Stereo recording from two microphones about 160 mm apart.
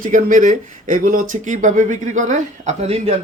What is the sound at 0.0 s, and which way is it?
Speech, 55° right (ahead or behind).